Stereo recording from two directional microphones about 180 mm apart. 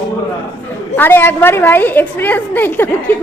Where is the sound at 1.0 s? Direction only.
10° left (ahead or behind).